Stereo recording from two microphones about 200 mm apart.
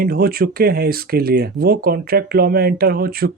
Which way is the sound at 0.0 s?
50° right (ahead or behind).